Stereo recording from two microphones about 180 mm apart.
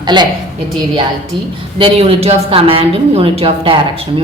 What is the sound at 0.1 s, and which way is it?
Speech, 25° right (ahead or behind).